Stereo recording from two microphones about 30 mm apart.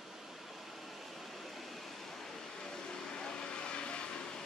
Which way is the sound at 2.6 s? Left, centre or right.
Left.